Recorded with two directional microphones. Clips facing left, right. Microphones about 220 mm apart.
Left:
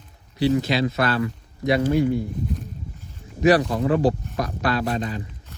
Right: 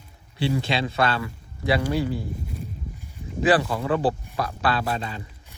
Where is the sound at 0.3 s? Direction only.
30° right (ahead or behind).